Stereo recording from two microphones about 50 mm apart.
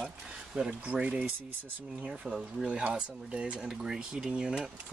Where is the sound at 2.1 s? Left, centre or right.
Centre.